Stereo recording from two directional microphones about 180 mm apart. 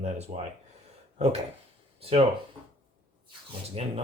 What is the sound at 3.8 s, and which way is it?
Speech, 35° right (ahead or behind).